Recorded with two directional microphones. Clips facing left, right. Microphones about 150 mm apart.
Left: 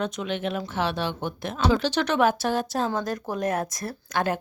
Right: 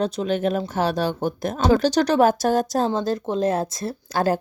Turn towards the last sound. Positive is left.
turn(degrees=-35)  # may be behind; listen again after turning